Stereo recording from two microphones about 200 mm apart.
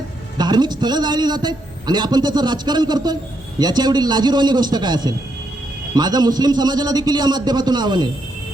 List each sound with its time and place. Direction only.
0.3 s a man's voice: 20° right (ahead or behind)